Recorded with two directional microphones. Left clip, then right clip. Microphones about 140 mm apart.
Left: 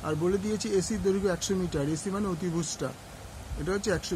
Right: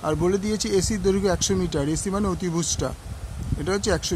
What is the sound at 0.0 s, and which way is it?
Speech, 90° right.